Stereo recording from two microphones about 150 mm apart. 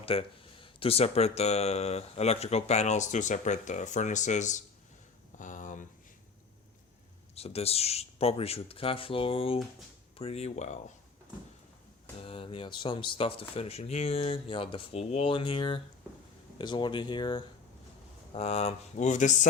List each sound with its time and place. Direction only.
0.0 s speech: 40° left (ahead or behind)
5.4 s a sound: 60° left (ahead or behind)
7.3 s speech: 40° left (ahead or behind)
12.2 s speech: 35° left (ahead or behind)
18.3 s speech: 45° left (ahead or behind)